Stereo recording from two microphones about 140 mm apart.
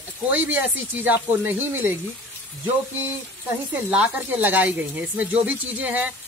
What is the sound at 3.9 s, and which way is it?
Speech, 15° right (ahead or behind).